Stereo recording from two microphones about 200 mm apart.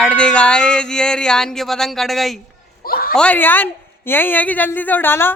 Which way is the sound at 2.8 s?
50° left (ahead or behind).